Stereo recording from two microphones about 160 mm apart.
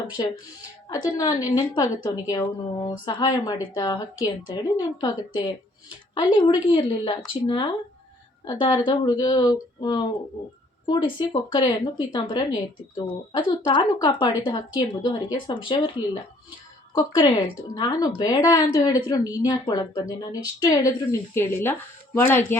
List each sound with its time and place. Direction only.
0.2 s a woman's voice: 30° left (ahead or behind); by 22.5 s 15° left (ahead or behind)